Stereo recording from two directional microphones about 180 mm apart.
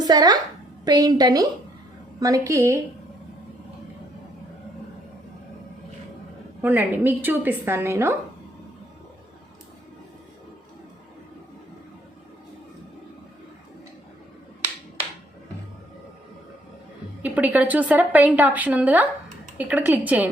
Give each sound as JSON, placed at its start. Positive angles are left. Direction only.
{"t": 0.0, "sound": "a woman's voice", "side_deg": -20}
{"t": 6.6, "sound": "a woman's voice", "side_deg": -10}
{"t": 17.2, "sound": "a woman's voice", "side_deg": -10}